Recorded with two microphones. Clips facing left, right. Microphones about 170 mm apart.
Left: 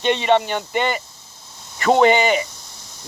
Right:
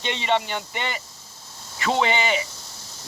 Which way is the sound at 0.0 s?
55° left (ahead or behind).